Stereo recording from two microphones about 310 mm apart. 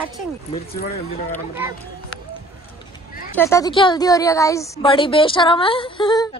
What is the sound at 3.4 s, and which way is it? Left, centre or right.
A woman's voice, centre.